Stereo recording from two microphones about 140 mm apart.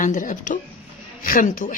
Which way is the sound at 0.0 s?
65° left (ahead or behind).